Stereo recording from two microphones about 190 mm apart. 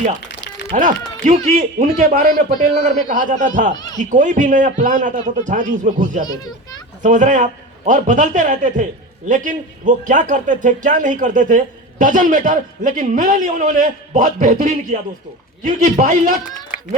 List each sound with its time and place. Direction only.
0.7 s a man's voice: 45° right (ahead or behind)
6.2 s a child's voice: 20° left (ahead or behind)
7.0 s a man's voice: 40° right (ahead or behind)